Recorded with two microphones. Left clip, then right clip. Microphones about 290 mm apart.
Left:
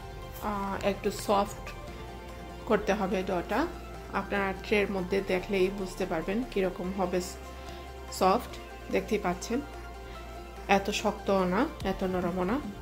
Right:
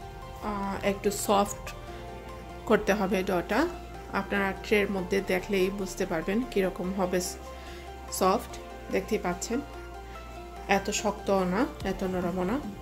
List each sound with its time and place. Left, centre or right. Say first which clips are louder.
0.4 s music: even; centre
1.0 s speech: right 3 dB; centre
2.7 s a woman's voice: right 2 dB; centre
10.7 s a woman's voice: even; centre